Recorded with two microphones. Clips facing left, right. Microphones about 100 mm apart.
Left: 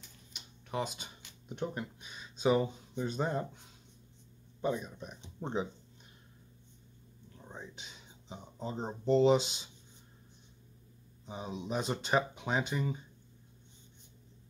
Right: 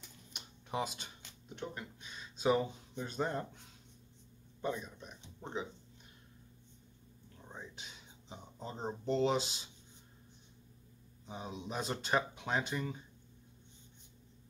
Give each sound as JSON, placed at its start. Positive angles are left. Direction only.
{"t": 0.7, "sound": "speech", "side_deg": 0}
{"t": 1.5, "sound": "speech", "side_deg": 20}
{"t": 4.6, "sound": "speech", "side_deg": 10}
{"t": 5.4, "sound": "speech", "side_deg": 30}
{"t": 7.4, "sound": "speech", "side_deg": 0}
{"t": 11.2, "sound": "speech", "side_deg": 5}